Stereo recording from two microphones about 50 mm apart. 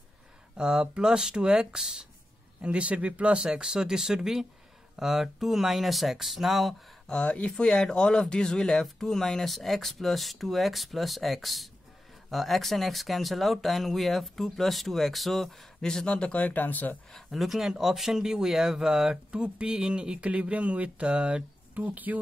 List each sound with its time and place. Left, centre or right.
0.6 s speech: centre
7.1 s speech: centre
16.2 s speech: left
17.1 s speech: centre; by 22.2 s right